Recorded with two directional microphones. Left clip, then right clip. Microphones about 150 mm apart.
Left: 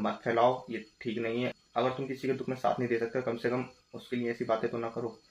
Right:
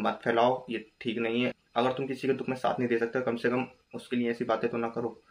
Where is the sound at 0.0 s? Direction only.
15° right (ahead or behind).